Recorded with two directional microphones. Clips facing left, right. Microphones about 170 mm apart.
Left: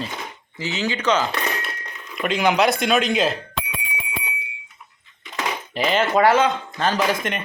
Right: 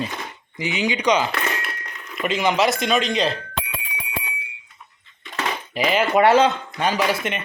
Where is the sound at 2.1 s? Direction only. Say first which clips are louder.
Left 1 dB; centre (ahead or behind).